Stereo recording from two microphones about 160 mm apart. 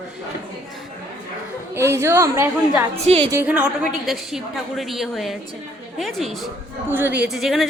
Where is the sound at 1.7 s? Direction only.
15° right (ahead or behind); by 6.5 s centre (ahead or behind).